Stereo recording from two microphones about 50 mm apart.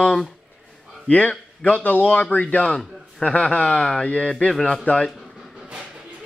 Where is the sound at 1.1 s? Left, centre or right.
Left.